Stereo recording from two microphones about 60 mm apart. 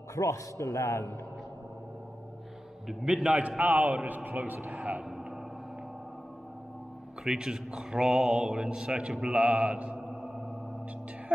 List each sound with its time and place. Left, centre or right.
0.1 s a man's voice: left
2.9 s speech: centre
3.3 s a man's voice: right
7.2 s speech: centre